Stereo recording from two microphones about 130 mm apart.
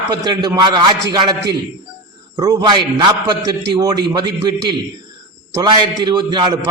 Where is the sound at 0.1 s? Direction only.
35° right (ahead or behind).